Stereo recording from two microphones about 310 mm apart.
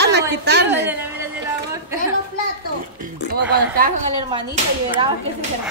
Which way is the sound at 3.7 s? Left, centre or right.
Right.